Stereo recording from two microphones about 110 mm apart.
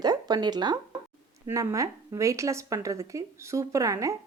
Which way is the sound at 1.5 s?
30° right (ahead or behind).